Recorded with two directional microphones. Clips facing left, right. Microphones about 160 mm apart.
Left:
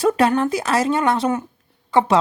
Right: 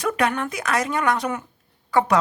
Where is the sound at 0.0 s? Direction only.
30° left (ahead or behind).